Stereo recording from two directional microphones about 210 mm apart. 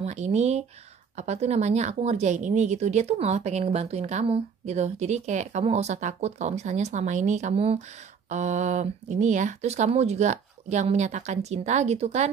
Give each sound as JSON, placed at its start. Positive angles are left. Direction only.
{"t": 0.0, "sound": "a woman's voice", "side_deg": -30}